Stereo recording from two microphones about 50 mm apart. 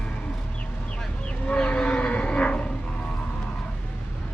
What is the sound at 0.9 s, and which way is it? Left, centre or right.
Livestock, centre.